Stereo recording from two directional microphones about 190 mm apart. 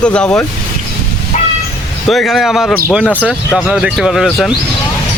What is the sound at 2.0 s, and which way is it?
A man's voice, centre (ahead or behind).